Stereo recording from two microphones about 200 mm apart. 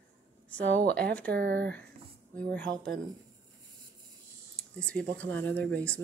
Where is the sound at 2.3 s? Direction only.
5° left (ahead or behind).